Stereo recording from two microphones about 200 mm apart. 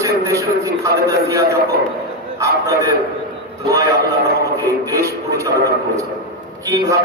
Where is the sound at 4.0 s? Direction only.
50° right (ahead or behind).